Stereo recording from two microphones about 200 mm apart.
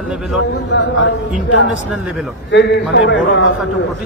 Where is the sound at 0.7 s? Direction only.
60° left (ahead or behind).